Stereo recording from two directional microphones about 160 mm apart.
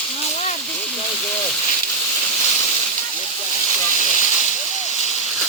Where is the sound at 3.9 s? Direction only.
50° left (ahead or behind).